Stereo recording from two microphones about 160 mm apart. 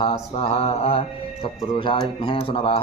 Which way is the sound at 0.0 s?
35° left (ahead or behind).